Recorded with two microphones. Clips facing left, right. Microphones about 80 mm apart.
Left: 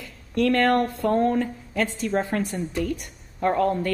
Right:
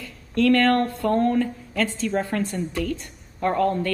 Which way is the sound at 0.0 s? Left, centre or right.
Centre.